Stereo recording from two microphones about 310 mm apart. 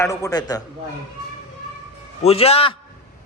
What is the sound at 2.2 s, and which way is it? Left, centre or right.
Speech, centre.